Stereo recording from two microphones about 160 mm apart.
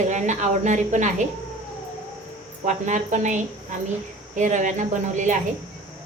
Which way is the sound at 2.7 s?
50° right (ahead or behind).